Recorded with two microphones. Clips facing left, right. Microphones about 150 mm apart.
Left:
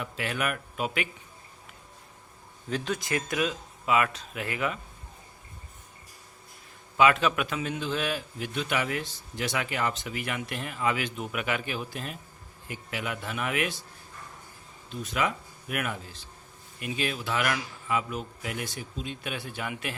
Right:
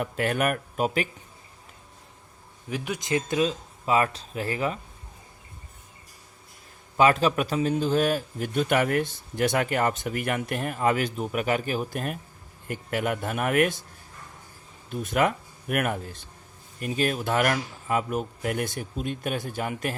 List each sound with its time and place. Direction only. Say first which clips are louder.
0.0 s a man's voice: right 6 dB; 50° right (ahead or behind)
2.6 s speech: right 1 dB; 15° right (ahead or behind); by 4.8 s 35° right (ahead or behind)
6.9 s a man's voice: right 2 dB; 40° right (ahead or behind)
14.8 s a man's voice: right 5 dB; 55° right (ahead or behind)